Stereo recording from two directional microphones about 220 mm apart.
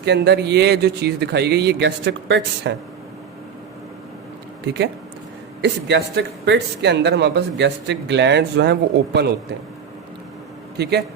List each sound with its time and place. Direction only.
0.0 s speech: 50° right (ahead or behind)
4.6 s speech: 50° right (ahead or behind)
10.8 s speech: 50° right (ahead or behind)